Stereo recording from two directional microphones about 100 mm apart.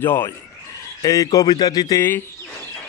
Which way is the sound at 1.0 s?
35° left (ahead or behind).